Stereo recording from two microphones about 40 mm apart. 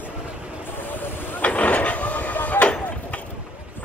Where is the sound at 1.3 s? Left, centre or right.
Left.